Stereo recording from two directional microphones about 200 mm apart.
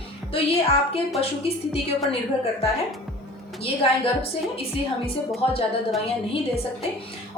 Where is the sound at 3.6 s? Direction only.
30° left (ahead or behind).